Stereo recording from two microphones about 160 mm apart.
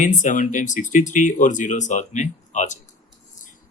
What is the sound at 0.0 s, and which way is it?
Speech, 50° left (ahead or behind).